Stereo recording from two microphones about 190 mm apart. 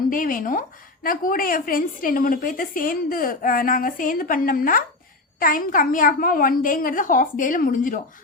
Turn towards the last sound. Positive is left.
turn(degrees=45)  # may be behind; listen again after turning